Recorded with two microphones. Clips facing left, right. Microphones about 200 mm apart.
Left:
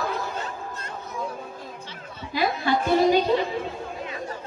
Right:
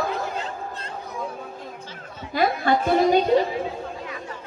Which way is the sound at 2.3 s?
50° right (ahead or behind).